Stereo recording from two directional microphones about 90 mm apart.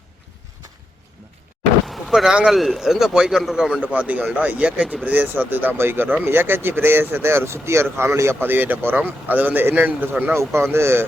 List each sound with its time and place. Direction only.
1.9 s speech: centre (ahead or behind); by 11.0 s 25° right (ahead or behind)